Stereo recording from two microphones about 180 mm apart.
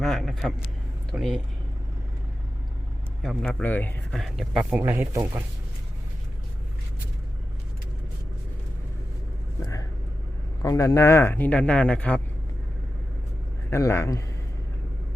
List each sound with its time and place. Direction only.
0.0 s speech: centre (ahead or behind)
3.4 s speech: 10° left (ahead or behind)
4.1 s speech: centre (ahead or behind)
4.8 s speech: 15° right (ahead or behind)
10.6 s speech: 20° left (ahead or behind)
13.7 s speech: 15° left (ahead or behind)